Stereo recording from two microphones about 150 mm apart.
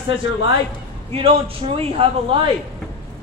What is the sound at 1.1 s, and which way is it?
Speech, 40° right (ahead or behind).